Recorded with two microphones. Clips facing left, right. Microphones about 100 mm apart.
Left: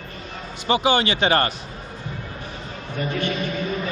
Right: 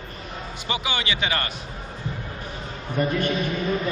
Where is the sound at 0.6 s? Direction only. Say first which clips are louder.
Left 9 dB; 40° left (ahead or behind).